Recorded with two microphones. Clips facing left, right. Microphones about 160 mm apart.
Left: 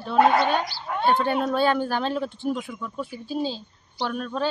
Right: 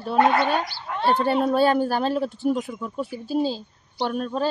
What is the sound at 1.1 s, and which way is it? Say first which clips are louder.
Speech: right 2 dB; 35° right (ahead or behind).